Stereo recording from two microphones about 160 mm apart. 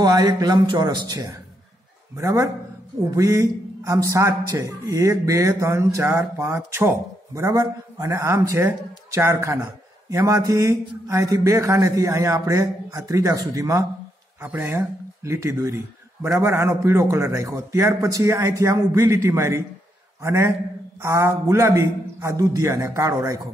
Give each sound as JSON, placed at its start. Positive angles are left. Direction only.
{"t": 0.0, "sound": "a man's voice", "side_deg": -25}